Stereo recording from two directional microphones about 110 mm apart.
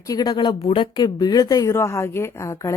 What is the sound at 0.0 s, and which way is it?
Speech, 35° left (ahead or behind).